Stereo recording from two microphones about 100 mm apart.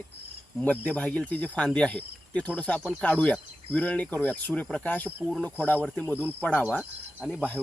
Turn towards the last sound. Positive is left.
turn(degrees=0)  # may be behind; listen again after turning